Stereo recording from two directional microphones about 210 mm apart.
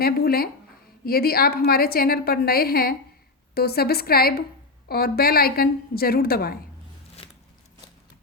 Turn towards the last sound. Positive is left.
turn(degrees=45)  # may be behind; listen again after turning